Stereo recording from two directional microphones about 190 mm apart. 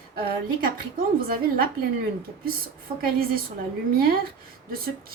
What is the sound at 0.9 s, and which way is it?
Speech, 50° right (ahead or behind).